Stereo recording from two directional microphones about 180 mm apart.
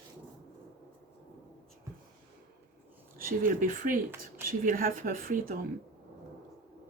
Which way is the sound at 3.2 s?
50° right (ahead or behind).